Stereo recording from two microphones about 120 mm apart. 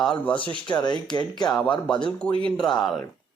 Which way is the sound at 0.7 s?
35° left (ahead or behind).